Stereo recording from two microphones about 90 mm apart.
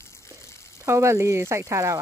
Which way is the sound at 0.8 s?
30° right (ahead or behind).